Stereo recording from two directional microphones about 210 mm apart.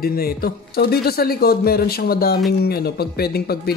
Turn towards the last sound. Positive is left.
turn(degrees=50)  # may be behind; listen again after turning